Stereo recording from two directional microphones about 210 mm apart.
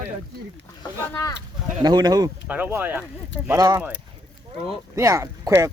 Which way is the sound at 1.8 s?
20° right (ahead or behind).